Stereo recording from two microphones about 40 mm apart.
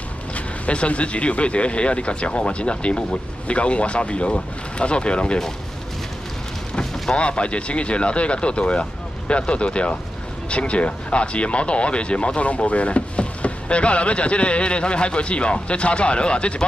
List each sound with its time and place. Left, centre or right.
0.3 s speech: left
7.2 s speech: left